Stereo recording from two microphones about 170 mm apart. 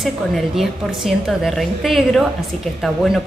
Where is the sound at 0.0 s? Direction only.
Centre (ahead or behind).